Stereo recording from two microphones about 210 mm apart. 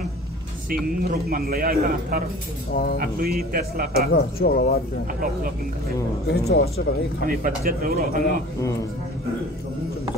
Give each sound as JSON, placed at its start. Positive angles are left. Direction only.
{"t": 0.7, "sound": "a man's voice", "side_deg": -45}
{"t": 2.7, "sound": "speech", "side_deg": 45}
{"t": 3.0, "sound": "a man's voice", "side_deg": -45}
{"t": 4.1, "sound": "speech", "side_deg": 45}
{"t": 5.2, "sound": "a man's voice", "side_deg": -45}
{"t": 6.2, "sound": "speech", "side_deg": 50}
{"t": 7.2, "sound": "a man's voice", "side_deg": -40}